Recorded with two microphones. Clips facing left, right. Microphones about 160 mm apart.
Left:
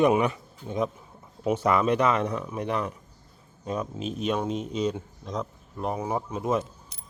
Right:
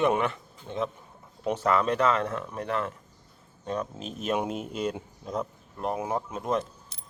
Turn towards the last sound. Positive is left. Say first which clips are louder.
# left 2 dB
turn(degrees=5)  # may be behind; listen again after turning